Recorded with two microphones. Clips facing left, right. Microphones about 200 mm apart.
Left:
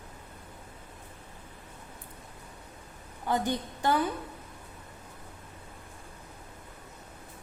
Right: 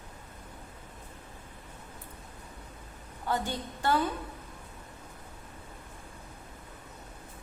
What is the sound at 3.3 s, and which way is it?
Speech, 15° left (ahead or behind).